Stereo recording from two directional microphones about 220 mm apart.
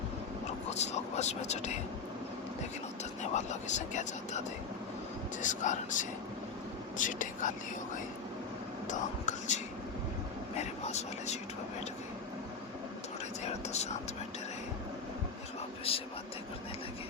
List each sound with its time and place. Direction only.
0.7 s speech: 30° left (ahead or behind)
3.3 s speech: 30° left (ahead or behind)
8.9 s speech: 35° left (ahead or behind)
10.6 s speech: 30° left (ahead or behind)
15.9 s speech: 25° left (ahead or behind)